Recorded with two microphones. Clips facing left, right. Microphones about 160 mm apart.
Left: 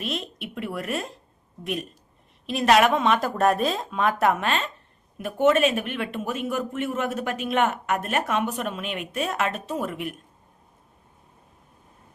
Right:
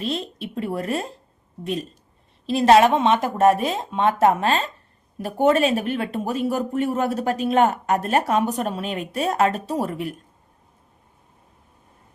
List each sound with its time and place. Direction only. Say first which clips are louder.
0.0 s a woman's voice: right 4 dB; 30° right (ahead or behind)